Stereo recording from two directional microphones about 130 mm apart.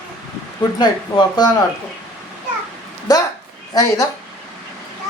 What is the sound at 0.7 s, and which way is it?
Speech, 30° left (ahead or behind).